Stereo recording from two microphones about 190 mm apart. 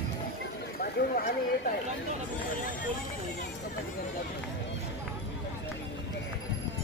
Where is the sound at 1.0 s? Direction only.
60° left (ahead or behind).